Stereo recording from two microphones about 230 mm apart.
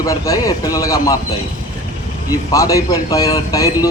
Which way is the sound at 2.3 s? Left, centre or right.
Centre.